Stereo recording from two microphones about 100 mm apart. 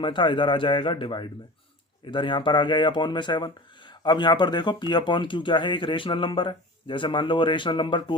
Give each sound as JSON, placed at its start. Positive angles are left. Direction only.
{"t": 0.0, "sound": "a man's voice", "side_deg": 55}